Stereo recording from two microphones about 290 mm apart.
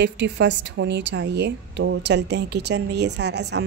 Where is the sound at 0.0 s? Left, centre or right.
Right.